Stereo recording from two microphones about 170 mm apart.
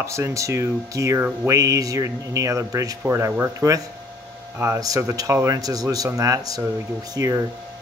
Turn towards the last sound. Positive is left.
turn(degrees=-20)  # may be behind; listen again after turning